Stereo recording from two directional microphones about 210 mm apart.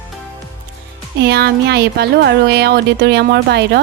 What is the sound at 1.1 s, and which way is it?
Speech, 50° right (ahead or behind).